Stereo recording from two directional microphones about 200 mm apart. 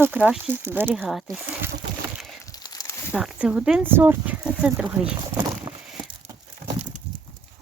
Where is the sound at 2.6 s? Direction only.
20° left (ahead or behind).